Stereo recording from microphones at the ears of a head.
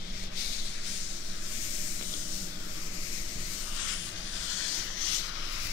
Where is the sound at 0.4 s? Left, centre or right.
Left.